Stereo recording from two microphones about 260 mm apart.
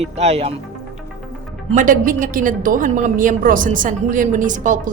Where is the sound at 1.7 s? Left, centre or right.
Right.